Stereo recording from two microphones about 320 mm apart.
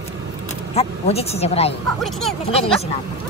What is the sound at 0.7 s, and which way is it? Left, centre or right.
Speech, centre.